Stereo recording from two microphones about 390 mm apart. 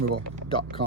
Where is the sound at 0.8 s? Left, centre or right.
Right.